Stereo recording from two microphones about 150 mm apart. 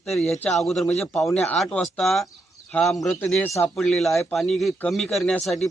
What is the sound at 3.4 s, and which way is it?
Speech, 20° left (ahead or behind).